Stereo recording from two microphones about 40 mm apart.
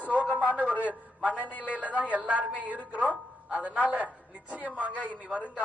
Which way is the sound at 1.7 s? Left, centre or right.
Right.